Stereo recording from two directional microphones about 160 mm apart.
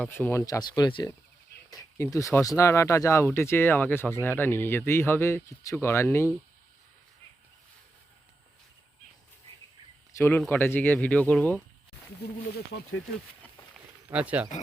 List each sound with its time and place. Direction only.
0.0 s speech: 10° left (ahead or behind)
10.2 s speech: 15° left (ahead or behind)
14.1 s speech: 10° right (ahead or behind)